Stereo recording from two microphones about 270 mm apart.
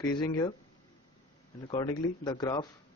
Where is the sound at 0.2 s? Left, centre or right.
Centre.